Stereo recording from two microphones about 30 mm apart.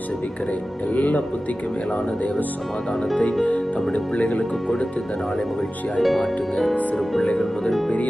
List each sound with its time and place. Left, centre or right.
0.9 s speech: left
3.4 s speech: left
6.0 s speech: centre